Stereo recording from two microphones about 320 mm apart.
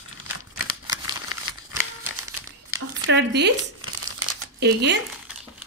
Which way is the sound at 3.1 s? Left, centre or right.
Right.